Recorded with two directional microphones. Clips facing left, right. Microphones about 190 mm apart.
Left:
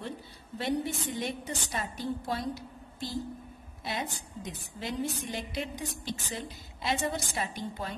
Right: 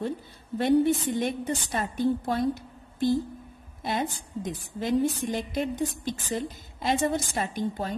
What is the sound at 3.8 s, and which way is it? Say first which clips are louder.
A woman's voice: right 6 dB; 50° right (ahead or behind).